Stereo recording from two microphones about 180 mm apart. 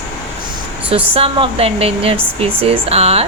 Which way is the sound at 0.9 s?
30° right (ahead or behind).